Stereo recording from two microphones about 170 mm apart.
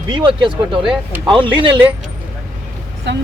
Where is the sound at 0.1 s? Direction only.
30° right (ahead or behind).